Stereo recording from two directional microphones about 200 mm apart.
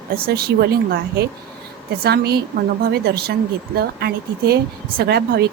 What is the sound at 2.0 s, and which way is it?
Speech, 50° right (ahead or behind).